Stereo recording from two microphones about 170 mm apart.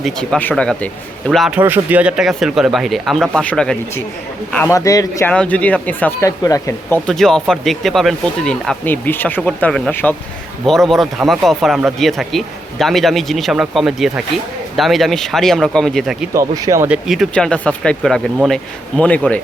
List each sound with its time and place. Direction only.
0.0 s speech: 5° left (ahead or behind)
1.5 s speech: 10° right (ahead or behind); by 3.8 s 5° left (ahead or behind)
4.5 s speech: 15° left (ahead or behind)
5.3 s speech: 5° left (ahead or behind)
7.1 s speech: 5° left (ahead or behind)
16.3 s speech: 20° right (ahead or behind)
17.1 s speech: centre (ahead or behind)